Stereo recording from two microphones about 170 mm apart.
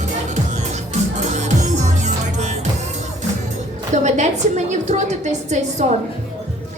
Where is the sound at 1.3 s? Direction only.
45° right (ahead or behind).